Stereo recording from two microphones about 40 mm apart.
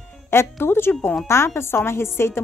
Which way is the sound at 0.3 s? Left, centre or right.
Left.